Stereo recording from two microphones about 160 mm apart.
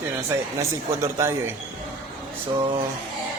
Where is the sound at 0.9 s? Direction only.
15° right (ahead or behind).